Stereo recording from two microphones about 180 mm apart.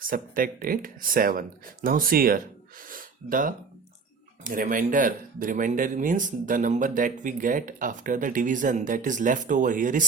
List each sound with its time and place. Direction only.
0.1 s speech: 50° right (ahead or behind)